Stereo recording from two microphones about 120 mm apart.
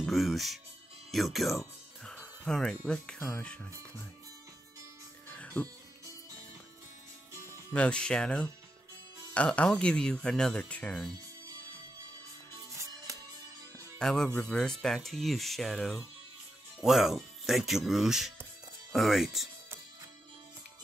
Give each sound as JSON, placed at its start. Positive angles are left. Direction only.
{"t": 0.0, "sound": "music", "side_deg": 0}
{"t": 1.1, "sound": "speech", "side_deg": 0}
{"t": 5.3, "sound": "music", "side_deg": 10}
{"t": 7.3, "sound": "music", "side_deg": -25}
{"t": 7.7, "sound": "speech", "side_deg": 10}
{"t": 12.7, "sound": "music", "side_deg": -25}
{"t": 13.9, "sound": "speech", "side_deg": 5}